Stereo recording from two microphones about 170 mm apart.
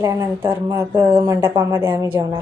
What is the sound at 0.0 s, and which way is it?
Speech, 20° right (ahead or behind).